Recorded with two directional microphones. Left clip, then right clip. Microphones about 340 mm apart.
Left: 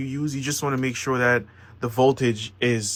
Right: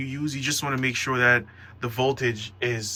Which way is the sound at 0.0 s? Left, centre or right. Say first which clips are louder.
Even; centre.